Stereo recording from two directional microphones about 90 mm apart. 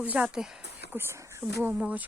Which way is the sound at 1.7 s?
15° right (ahead or behind).